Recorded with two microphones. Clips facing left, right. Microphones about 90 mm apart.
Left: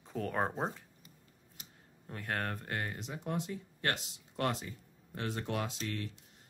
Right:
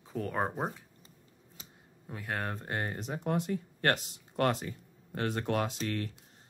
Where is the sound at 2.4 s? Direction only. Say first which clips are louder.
Right 3 dB; 25° right (ahead or behind); by 6.1 s 50° right (ahead or behind).